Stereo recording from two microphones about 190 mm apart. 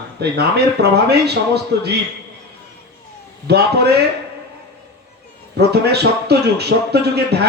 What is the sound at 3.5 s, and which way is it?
Speech, 60° right (ahead or behind).